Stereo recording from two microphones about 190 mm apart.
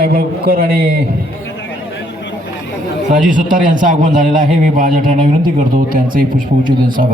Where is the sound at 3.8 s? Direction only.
45° right (ahead or behind).